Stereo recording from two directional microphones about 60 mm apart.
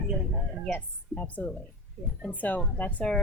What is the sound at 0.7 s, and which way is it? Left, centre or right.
Speech, left.